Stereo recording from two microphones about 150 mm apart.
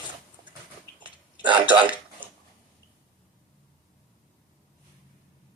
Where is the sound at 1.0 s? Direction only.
30° right (ahead or behind).